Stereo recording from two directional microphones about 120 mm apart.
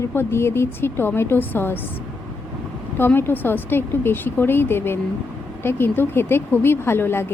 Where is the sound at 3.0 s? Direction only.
20° left (ahead or behind).